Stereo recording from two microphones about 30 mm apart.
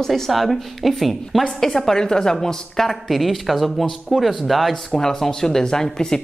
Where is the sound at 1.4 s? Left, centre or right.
Centre.